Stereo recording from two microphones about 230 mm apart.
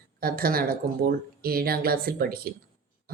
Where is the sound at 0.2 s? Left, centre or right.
Right.